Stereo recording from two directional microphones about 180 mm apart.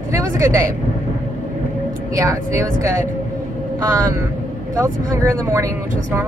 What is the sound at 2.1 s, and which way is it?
Speech, 15° right (ahead or behind).